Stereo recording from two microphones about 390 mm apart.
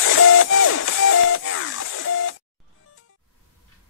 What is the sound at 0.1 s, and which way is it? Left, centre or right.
Music, left.